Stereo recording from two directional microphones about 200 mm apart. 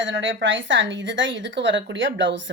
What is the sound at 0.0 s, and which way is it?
Speech, 70° right (ahead or behind).